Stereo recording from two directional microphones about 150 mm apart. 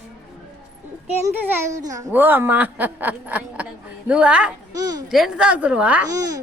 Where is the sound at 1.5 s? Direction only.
20° right (ahead or behind).